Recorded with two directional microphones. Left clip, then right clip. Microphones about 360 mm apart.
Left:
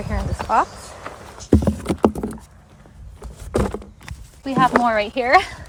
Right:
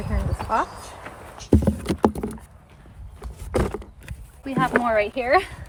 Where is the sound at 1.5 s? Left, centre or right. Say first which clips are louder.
Left 3 dB; centre.